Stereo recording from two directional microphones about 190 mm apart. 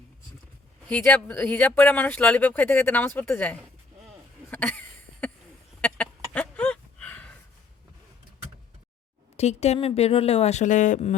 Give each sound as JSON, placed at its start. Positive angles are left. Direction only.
{"t": 0.9, "sound": "speech", "side_deg": 10}
{"t": 4.5, "sound": "a sound", "side_deg": 10}
{"t": 9.4, "sound": "speech", "side_deg": 35}